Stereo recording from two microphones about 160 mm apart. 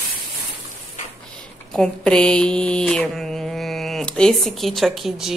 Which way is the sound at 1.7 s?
5° left (ahead or behind).